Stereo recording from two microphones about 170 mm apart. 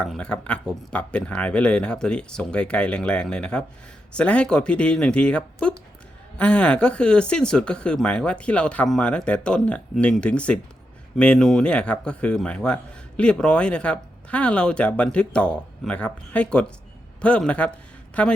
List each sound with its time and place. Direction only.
0.0 s a man's voice: 5° left (ahead or behind)